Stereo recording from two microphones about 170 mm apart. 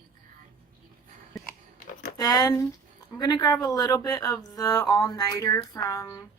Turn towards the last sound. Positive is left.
turn(degrees=20)  # may be behind; listen again after turning